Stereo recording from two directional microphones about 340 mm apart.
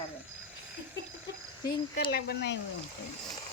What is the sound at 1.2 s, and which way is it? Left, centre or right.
Speech, left.